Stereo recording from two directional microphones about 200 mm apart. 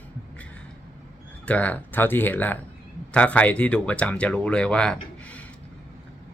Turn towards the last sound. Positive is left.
turn(degrees=5)  # may be behind; listen again after turning